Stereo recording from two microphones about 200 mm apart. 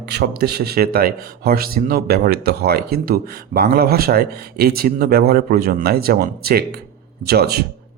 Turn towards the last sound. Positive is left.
turn(degrees=-50)  # may be behind; listen again after turning